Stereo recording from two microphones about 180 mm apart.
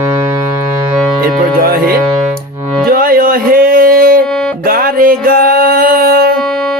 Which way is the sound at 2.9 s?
55° right (ahead or behind).